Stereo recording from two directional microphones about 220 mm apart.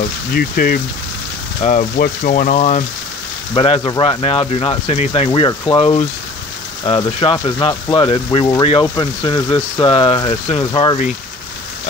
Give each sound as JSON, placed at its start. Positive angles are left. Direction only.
{"t": 0.3, "sound": "speech", "side_deg": 40}